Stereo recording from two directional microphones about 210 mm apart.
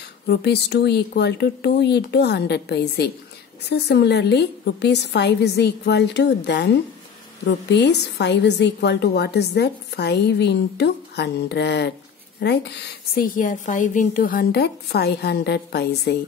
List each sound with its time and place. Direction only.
0.3 s a woman's voice: 50° left (ahead or behind)